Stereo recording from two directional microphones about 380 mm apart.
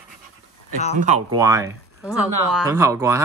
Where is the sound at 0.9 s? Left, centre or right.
Centre.